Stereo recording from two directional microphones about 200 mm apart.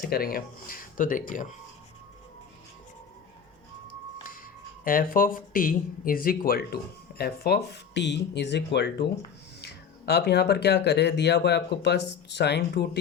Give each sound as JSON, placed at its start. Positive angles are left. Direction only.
{"t": 0.1, "sound": "speech", "side_deg": 50}
{"t": 4.3, "sound": "speech", "side_deg": 45}